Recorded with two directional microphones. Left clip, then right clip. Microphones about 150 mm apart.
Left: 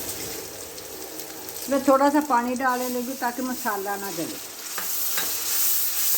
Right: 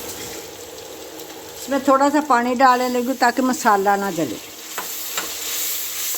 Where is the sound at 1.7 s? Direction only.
15° right (ahead or behind).